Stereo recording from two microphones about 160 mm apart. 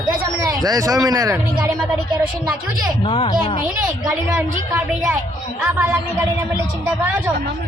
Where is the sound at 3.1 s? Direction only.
35° left (ahead or behind).